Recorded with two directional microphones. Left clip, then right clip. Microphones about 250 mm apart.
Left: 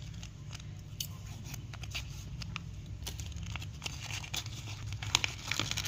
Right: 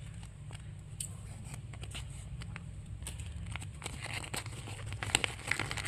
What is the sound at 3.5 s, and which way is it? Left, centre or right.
Tearing, centre.